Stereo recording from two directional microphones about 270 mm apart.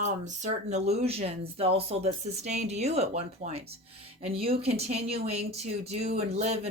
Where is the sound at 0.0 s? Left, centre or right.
Right.